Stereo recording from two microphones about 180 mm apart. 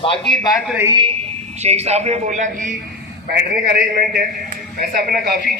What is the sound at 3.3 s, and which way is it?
Speech, 60° right (ahead or behind).